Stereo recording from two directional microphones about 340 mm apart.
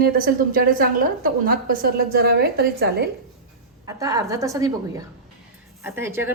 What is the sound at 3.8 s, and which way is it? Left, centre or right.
Speech, centre.